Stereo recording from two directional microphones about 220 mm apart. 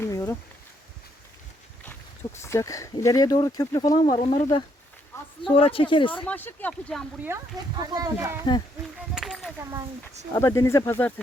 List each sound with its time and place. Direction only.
0.0 s a sound: 10° left (ahead or behind)
1.8 s speech: 10° left (ahead or behind)
6.2 s speech: 10° left (ahead or behind)
7.8 s speech: 15° right (ahead or behind)
9.1 s a sound: centre (ahead or behind)
10.3 s speech: 15° left (ahead or behind)